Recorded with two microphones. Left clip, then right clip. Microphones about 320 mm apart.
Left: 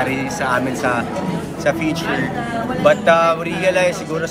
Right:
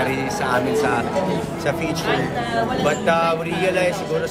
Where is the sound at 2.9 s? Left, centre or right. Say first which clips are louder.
Left 8 dB; centre.